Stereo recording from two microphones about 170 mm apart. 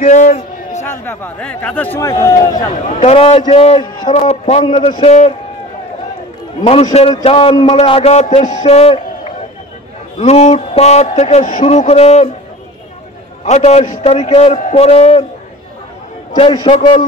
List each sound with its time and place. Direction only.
0.0 s a sound: 40° left (ahead or behind)
1.0 s speech: 10° left (ahead or behind)
3.0 s a man's voice: 35° left (ahead or behind)
6.6 s a man's voice: 40° left (ahead or behind)
10.1 s a man's voice: 40° left (ahead or behind)
13.5 s a man's voice: 40° left (ahead or behind)
16.3 s a man's voice: 35° left (ahead or behind)